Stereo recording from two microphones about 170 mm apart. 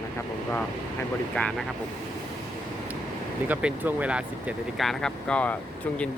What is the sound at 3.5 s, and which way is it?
Speech, 10° right (ahead or behind).